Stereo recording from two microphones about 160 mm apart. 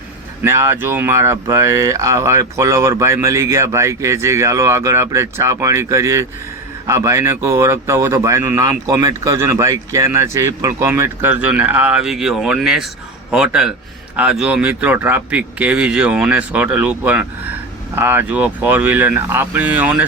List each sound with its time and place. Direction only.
0.4 s a man's voice: 15° right (ahead or behind)